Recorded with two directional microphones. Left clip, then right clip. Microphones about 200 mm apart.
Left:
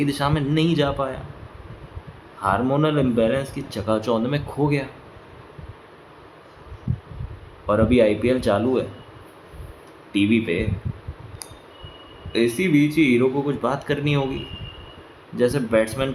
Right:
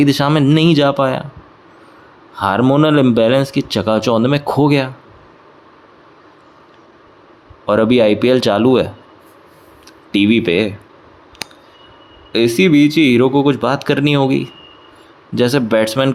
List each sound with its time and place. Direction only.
0.0 s speech: 45° right (ahead or behind)
2.4 s speech: 45° right (ahead or behind)
7.7 s speech: 50° right (ahead or behind)
10.1 s speech: 45° right (ahead or behind)
12.3 s speech: 45° right (ahead or behind)